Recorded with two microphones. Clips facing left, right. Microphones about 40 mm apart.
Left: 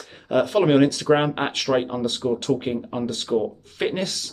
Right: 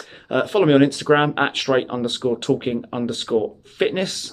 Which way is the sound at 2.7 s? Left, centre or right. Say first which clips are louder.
Right 2 dB; right.